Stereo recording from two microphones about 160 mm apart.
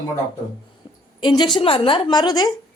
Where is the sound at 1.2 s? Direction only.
25° left (ahead or behind).